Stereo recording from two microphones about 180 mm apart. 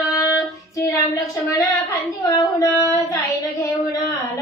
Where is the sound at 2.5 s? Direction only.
15° left (ahead or behind).